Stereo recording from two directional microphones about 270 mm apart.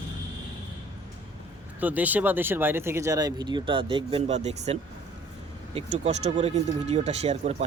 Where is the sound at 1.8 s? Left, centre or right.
Centre.